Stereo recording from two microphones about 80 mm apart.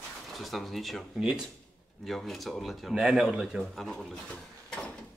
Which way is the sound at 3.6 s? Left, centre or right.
Centre.